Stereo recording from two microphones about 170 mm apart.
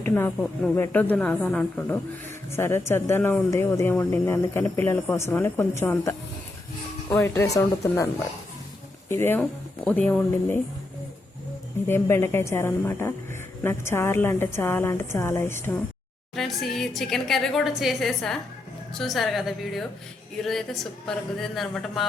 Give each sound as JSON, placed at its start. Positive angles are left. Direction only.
{"t": 0.0, "sound": "speech", "side_deg": 15}
{"t": 11.9, "sound": "speech", "side_deg": 15}
{"t": 16.3, "sound": "a woman's voice", "side_deg": 0}